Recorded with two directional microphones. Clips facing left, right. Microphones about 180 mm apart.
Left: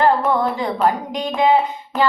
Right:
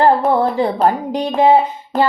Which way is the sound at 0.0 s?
35° right (ahead or behind).